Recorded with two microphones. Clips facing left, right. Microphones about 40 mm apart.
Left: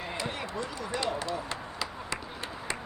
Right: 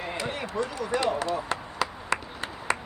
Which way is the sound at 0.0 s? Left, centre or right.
Right.